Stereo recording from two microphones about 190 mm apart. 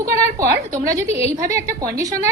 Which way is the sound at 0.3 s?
15° right (ahead or behind).